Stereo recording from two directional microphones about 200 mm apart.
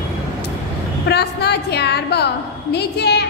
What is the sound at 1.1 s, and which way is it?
A woman's voice, 55° left (ahead or behind).